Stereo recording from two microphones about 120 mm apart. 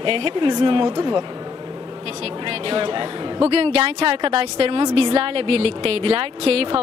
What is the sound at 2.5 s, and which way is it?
Speech, 45° right (ahead or behind).